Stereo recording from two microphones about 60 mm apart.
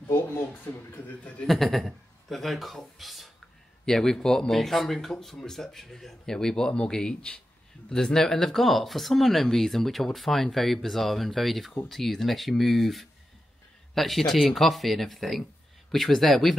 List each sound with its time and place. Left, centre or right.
0.7 s speech: left
1.5 s speech: centre